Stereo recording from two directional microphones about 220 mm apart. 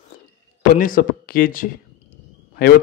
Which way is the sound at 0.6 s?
40° left (ahead or behind).